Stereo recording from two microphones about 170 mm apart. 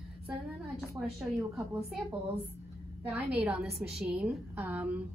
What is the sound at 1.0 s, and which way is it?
Speech, 10° right (ahead or behind).